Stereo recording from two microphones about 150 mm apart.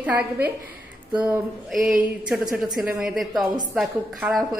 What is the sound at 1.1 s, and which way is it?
A woman's voice, 10° right (ahead or behind).